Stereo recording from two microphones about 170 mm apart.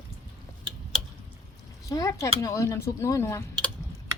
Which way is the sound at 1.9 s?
20° left (ahead or behind).